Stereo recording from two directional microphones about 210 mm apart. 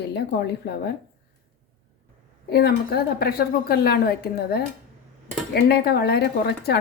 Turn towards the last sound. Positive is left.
turn(degrees=50)  # may be behind; listen again after turning